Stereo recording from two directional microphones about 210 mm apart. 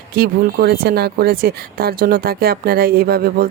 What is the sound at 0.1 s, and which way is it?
Speech, 45° right (ahead or behind).